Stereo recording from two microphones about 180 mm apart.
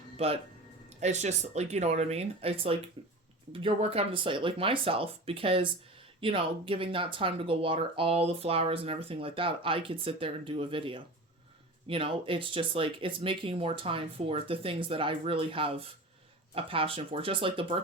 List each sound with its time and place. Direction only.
0.9 s speech: 40° right (ahead or behind)